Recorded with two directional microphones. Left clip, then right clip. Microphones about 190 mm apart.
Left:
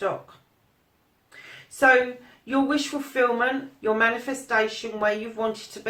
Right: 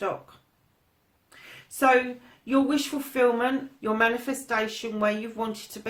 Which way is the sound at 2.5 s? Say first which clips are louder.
Left 1 dB; 50° right (ahead or behind).